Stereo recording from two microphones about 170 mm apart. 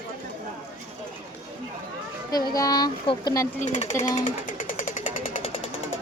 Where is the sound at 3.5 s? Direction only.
40° left (ahead or behind).